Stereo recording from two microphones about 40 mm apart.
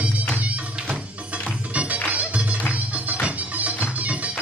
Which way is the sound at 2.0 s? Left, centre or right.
Right.